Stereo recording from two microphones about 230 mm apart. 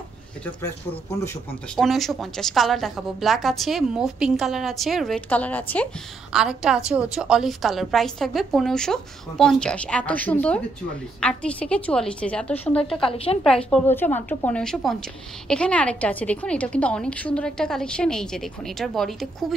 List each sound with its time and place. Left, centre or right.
1.2 s a woman's voice: centre
13.0 s a woman's voice: left
13.4 s a woman's voice: centre